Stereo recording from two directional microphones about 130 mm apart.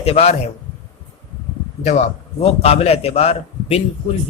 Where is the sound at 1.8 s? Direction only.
60° left (ahead or behind).